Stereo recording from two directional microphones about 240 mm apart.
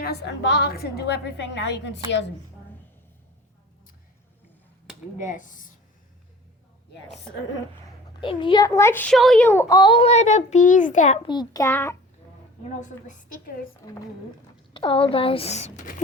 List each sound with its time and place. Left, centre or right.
0.0 s a woman's voice: left
5.1 s a woman's voice: left
8.2 s a child's voice: left
12.8 s a woman's voice: left
14.7 s speech: left